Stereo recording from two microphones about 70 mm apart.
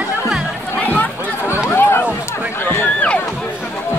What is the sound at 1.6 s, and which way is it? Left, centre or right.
Chatter, left.